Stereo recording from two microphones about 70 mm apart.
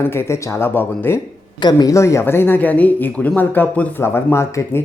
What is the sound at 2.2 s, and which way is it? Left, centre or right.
Speech, left.